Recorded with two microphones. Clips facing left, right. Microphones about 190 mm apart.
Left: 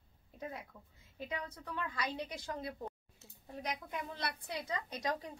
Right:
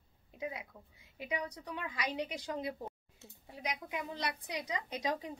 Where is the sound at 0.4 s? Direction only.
10° right (ahead or behind).